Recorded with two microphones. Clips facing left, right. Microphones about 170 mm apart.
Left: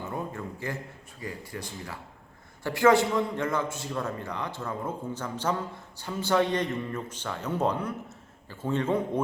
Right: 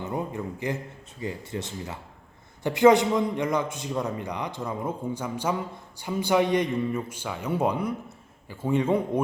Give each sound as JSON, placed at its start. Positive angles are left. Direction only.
{"t": 0.0, "sound": "a man's voice", "side_deg": -20}